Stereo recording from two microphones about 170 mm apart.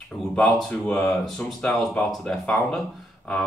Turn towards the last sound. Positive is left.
turn(degrees=5)  # may be behind; listen again after turning